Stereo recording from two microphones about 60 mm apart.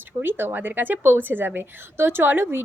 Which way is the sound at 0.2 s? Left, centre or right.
Right.